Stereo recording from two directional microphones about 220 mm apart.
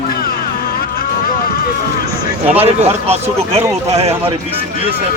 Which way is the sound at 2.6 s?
30° right (ahead or behind).